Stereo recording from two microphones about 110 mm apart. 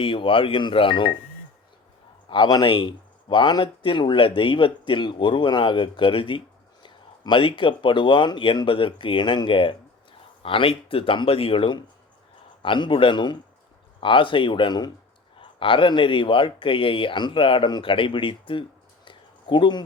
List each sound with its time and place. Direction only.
0.0 s speech: 50° left (ahead or behind)
2.3 s speech: 45° left (ahead or behind)
19.0 s a sound: 45° left (ahead or behind)